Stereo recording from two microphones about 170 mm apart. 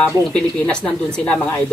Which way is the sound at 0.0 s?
5° left (ahead or behind).